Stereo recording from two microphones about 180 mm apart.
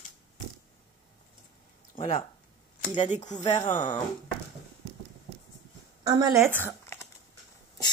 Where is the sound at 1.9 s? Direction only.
35° left (ahead or behind).